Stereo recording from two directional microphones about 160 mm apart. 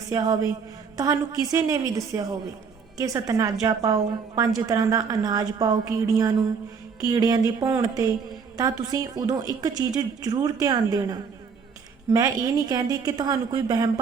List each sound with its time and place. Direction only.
0.1 s a woman's voice: 25° right (ahead or behind)